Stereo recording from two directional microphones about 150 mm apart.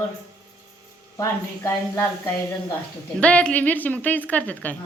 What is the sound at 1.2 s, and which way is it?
Speech, 15° left (ahead or behind).